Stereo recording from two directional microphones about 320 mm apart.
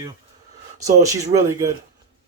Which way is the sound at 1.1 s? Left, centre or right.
Centre.